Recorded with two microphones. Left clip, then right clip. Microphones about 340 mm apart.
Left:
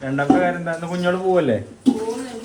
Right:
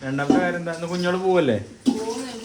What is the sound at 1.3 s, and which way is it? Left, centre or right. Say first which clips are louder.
Speech: left 1 dB; centre.